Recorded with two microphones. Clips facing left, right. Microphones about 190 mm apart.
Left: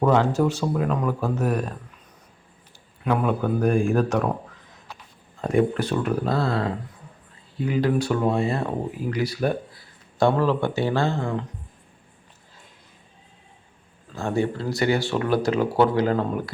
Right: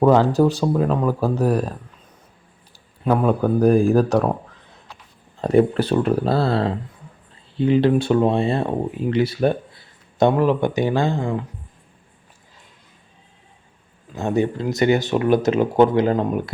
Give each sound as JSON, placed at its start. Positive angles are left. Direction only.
{"t": 0.0, "sound": "speech", "side_deg": -35}
{"t": 3.0, "sound": "speech", "side_deg": -35}
{"t": 5.4, "sound": "speech", "side_deg": -35}
{"t": 14.1, "sound": "speech", "side_deg": -20}